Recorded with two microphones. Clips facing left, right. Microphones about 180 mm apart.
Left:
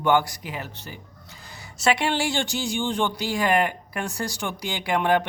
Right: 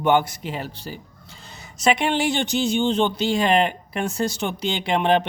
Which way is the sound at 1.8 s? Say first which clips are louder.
Right 3 dB; 20° right (ahead or behind).